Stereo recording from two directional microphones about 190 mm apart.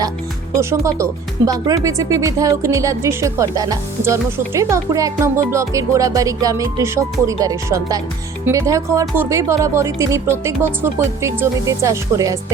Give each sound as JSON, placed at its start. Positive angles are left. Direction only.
{"t": 0.6, "sound": "speech", "side_deg": -15}